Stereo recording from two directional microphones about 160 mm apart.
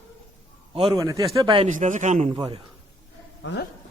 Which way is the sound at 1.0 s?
20° right (ahead or behind).